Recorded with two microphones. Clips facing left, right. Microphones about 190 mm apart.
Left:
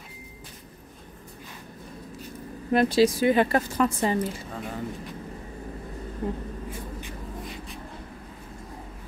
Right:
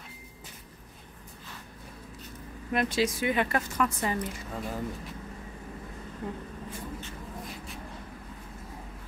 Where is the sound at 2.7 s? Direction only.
35° left (ahead or behind).